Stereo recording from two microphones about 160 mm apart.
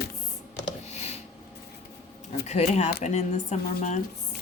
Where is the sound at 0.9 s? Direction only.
45° left (ahead or behind).